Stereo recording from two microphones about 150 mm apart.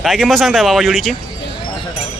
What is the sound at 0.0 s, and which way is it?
Speech, 5° left (ahead or behind).